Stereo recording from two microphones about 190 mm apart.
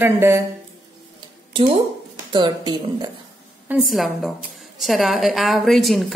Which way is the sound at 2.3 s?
20° right (ahead or behind).